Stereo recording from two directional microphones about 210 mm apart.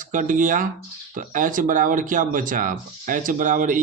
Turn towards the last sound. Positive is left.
turn(degrees=-40)  # may be behind; listen again after turning